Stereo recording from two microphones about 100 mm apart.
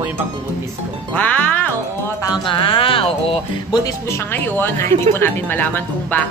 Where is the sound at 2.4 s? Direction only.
60° left (ahead or behind).